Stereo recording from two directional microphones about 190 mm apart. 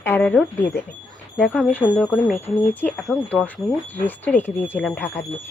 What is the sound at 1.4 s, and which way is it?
Speech, centre (ahead or behind).